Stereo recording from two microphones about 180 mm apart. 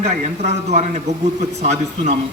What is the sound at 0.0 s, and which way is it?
A man's voice, 40° right (ahead or behind).